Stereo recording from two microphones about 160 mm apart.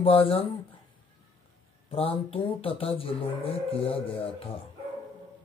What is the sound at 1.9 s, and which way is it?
Speech, 35° left (ahead or behind).